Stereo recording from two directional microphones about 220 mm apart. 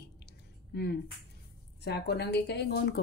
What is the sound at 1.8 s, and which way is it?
Speech, 45° left (ahead or behind).